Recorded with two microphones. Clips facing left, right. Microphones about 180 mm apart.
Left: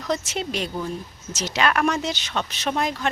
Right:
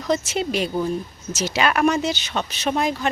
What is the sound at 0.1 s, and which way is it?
Speech, 5° right (ahead or behind).